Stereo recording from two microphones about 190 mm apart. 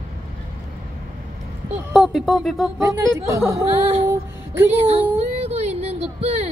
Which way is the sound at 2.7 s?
15° right (ahead or behind).